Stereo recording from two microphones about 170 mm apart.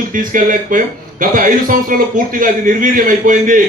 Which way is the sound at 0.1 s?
50° right (ahead or behind).